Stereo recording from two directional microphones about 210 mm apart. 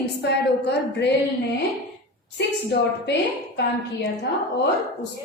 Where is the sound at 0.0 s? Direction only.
55° left (ahead or behind).